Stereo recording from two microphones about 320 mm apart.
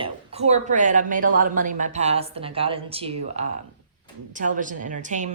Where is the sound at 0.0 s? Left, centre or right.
Centre.